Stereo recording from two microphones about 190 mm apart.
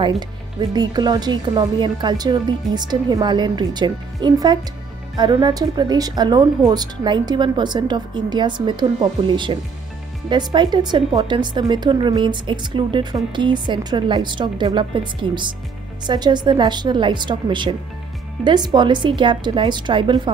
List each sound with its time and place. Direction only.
0.6 s speech: 20° right (ahead or behind)